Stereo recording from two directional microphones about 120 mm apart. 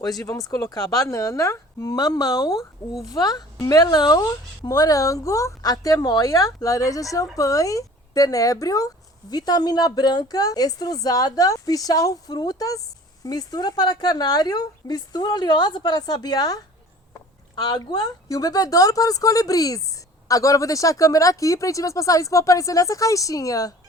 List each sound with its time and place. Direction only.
0.0 s a woman's voice: 30° left (ahead or behind)